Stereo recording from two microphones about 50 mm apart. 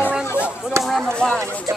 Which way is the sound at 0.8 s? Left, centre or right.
Centre.